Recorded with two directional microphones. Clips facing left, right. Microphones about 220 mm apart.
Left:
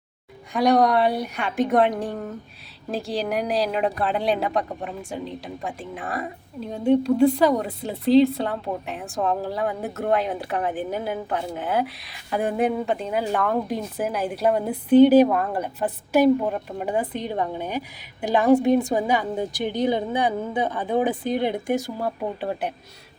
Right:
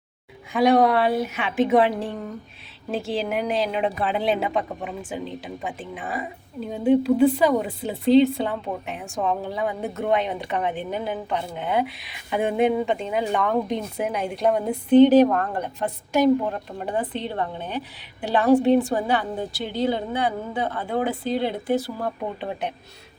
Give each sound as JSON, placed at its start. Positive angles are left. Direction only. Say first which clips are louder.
{"t": 0.5, "sound": "a woman's voice", "louder": "right 1 dB", "side_deg": 0}